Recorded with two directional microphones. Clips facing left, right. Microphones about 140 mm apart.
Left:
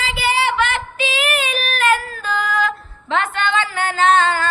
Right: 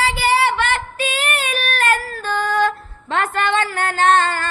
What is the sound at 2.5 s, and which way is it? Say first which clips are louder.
Music: right 4 dB; 40° right (ahead or behind).